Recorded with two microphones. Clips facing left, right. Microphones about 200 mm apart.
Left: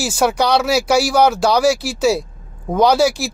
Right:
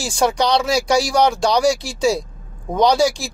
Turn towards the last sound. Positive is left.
turn(degrees=5)  # may be behind; listen again after turning